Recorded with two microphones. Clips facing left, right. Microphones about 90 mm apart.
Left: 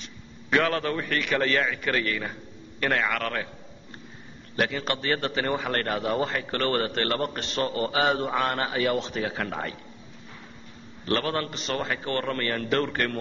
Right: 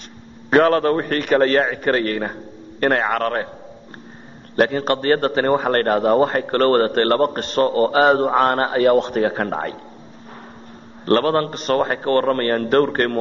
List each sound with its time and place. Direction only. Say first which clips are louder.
0.5 s a man's voice: right 10 dB; 45° right (ahead or behind)
4.6 s a man's voice: right 9 dB; 45° right (ahead or behind)
11.1 s a man's voice: right 10 dB; 45° right (ahead or behind)